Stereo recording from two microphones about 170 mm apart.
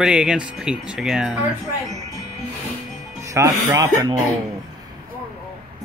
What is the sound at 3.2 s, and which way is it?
Speech, 20° right (ahead or behind).